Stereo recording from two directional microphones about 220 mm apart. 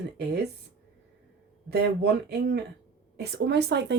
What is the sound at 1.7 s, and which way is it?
Speech, 45° right (ahead or behind).